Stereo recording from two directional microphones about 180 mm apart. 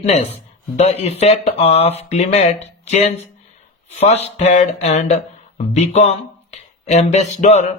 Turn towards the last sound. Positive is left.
turn(degrees=40)  # may be behind; listen again after turning